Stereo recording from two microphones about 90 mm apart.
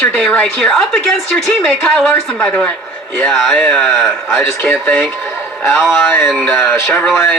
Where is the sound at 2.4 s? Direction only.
15° left (ahead or behind).